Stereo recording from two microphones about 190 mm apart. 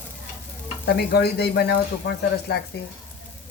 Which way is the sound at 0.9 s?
60° left (ahead or behind).